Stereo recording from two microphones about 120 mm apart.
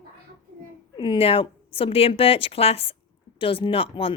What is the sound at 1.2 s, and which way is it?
A woman's voice, 50° left (ahead or behind).